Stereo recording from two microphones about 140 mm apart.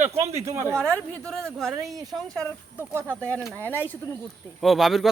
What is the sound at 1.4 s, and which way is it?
Speech, centre (ahead or behind).